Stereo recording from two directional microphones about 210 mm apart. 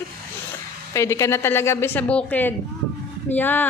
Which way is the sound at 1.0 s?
15° left (ahead or behind).